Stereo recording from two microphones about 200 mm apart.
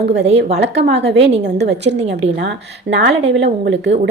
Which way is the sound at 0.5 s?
55° right (ahead or behind).